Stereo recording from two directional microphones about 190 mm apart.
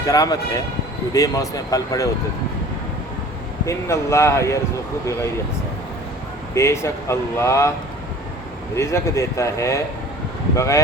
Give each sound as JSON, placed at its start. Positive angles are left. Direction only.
{"t": 0.0, "sound": "speech", "side_deg": 20}
{"t": 3.7, "sound": "speech", "side_deg": 15}
{"t": 6.5, "sound": "speech", "side_deg": 15}
{"t": 8.7, "sound": "speech", "side_deg": 15}